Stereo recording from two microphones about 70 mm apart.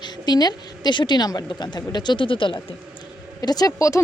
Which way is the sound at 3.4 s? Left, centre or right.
Left.